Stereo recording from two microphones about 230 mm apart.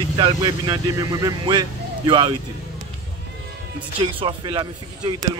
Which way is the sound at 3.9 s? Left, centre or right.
Right.